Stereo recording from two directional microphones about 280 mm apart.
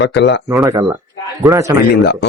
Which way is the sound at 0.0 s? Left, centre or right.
Left.